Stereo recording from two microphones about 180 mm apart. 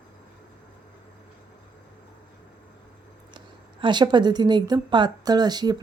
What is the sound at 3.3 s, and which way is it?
Speech, 25° right (ahead or behind).